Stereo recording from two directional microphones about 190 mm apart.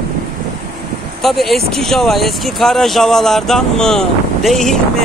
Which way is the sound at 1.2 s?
Centre (ahead or behind).